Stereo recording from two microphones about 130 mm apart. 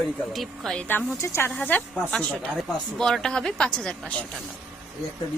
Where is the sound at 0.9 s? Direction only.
20° left (ahead or behind).